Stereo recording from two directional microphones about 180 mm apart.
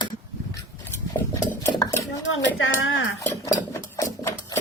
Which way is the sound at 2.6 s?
90° left.